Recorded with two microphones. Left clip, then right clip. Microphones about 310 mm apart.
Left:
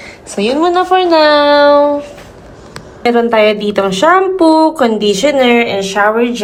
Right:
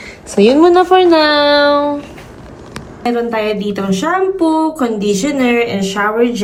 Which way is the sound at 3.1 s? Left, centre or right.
Left.